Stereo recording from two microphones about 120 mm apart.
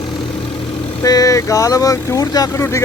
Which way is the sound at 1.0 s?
30° left (ahead or behind).